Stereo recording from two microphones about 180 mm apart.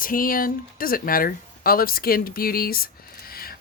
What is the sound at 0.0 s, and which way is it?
Speech, 50° left (ahead or behind).